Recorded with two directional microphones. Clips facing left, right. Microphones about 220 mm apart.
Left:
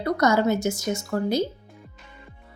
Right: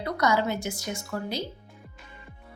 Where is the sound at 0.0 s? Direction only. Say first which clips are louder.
Left 5 dB; 45° left (ahead or behind).